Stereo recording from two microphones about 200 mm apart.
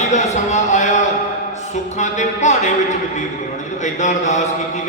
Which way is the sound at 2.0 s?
35° left (ahead or behind).